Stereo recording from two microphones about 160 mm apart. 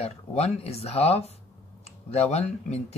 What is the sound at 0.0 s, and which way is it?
Speech, 40° left (ahead or behind).